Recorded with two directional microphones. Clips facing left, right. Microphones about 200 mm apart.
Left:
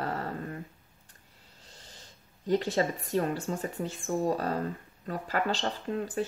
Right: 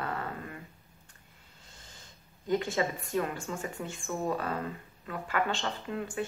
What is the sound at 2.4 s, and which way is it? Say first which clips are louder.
Speech: left 2 dB; 35° left (ahead or behind).